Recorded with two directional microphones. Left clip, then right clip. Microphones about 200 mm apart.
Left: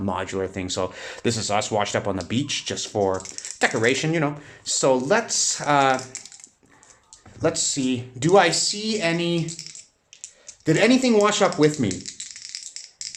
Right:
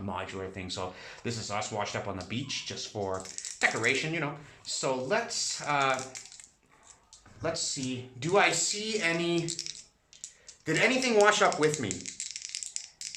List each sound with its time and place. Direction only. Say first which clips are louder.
0.0 s speech: left 10 dB; 30° left (ahead or behind)
7.4 s speech: left 10 dB; 40° left (ahead or behind); by 9.4 s 15° left (ahead or behind)
10.7 s speech: left 8 dB; 25° left (ahead or behind)
12.0 s rattle: left 3 dB; 15° right (ahead or behind)
13.0 s a sound: left 7 dB; 15° right (ahead or behind)